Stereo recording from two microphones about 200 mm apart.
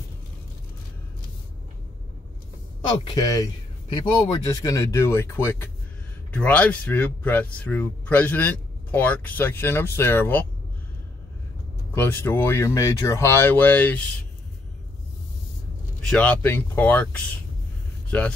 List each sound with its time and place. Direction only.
2.9 s speech: 20° left (ahead or behind)
11.9 s speech: 10° left (ahead or behind)
16.0 s speech: 5° left (ahead or behind)